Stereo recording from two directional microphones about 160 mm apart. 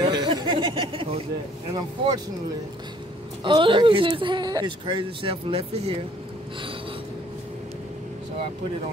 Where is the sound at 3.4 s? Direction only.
30° right (ahead or behind).